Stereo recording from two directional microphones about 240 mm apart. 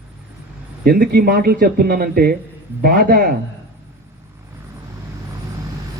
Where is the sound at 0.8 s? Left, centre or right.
Right.